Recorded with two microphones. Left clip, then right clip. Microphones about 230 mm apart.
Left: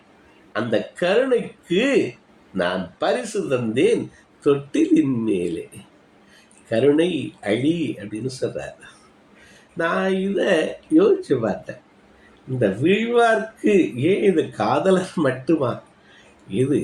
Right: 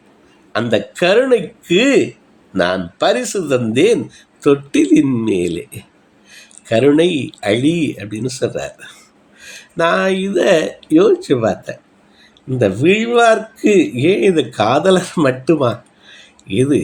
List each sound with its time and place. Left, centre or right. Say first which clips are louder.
0.5 s speech: right 6 dB; right
9.7 s speech: right 7 dB; right